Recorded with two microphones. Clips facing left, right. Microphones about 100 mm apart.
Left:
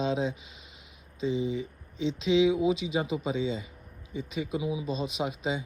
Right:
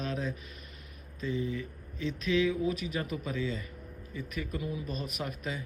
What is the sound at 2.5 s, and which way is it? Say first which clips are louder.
Speech: left 5 dB; 90° left.